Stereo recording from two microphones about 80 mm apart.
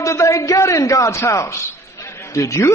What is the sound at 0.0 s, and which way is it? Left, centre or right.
A man's voice, left.